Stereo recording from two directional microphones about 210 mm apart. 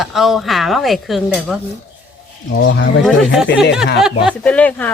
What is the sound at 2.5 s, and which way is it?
Speech, 55° left (ahead or behind).